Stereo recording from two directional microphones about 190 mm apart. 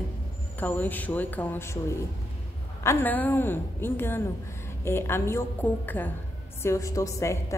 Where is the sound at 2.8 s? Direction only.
10° left (ahead or behind).